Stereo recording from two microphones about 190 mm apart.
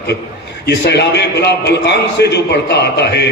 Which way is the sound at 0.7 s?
60° left (ahead or behind).